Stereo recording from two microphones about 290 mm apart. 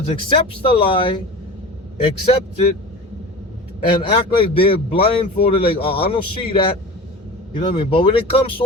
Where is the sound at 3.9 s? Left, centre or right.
Centre.